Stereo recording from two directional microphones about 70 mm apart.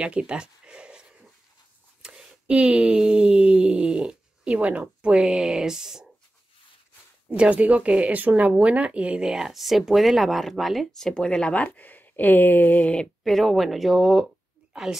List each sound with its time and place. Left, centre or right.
0.0 s a sound: centre
2.0 s speech: centre
7.2 s speech: right; by 13.1 s centre
13.2 s a woman's voice: centre